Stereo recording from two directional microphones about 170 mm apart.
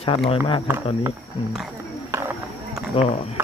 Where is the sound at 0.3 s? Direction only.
30° left (ahead or behind).